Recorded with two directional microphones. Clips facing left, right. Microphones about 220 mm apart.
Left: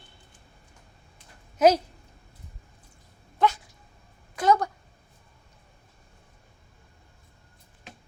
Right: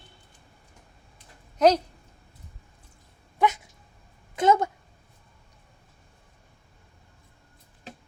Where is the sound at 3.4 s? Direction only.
20° right (ahead or behind).